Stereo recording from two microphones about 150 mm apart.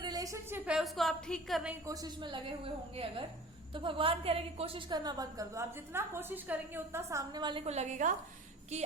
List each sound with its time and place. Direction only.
0.0 s a woman's voice: 25° right (ahead or behind); by 1.7 s centre (ahead or behind)
1.9 s a woman's voice: 25° right (ahead or behind)
7.4 s a woman's voice: 40° right (ahead or behind)